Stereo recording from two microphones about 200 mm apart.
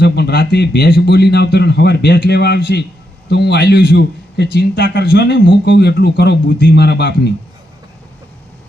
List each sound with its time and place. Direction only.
0.0 s a man's voice: 50° left (ahead or behind)